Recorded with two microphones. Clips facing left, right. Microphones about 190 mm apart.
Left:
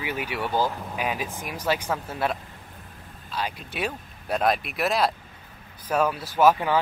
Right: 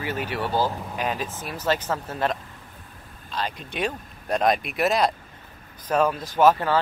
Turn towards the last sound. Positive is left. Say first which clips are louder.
# right 1 dB
turn(degrees=10)  # may be behind; listen again after turning